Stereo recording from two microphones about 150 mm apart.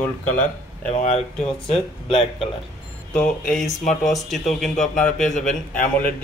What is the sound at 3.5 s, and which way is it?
Speech, 5° left (ahead or behind).